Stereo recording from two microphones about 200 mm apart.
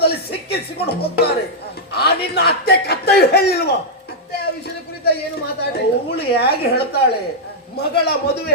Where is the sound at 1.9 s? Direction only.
55° left (ahead or behind).